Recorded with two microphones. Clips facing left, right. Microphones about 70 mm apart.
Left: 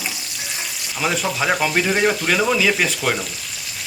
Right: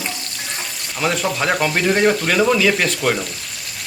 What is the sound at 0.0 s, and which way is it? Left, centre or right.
Water tap, centre.